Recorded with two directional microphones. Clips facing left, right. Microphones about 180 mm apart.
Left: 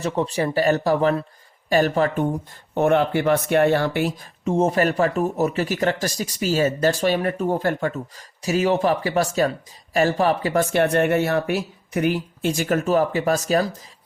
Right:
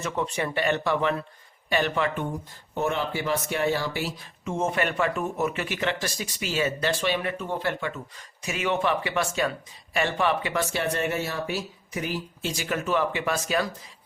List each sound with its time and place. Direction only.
0.0 s speech: 35° left (ahead or behind)
2.7 s speech: 60° left (ahead or behind)
4.4 s speech: 35° left (ahead or behind)